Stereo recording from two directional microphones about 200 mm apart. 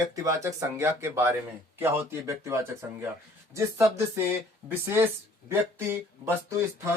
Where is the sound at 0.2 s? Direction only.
15° right (ahead or behind).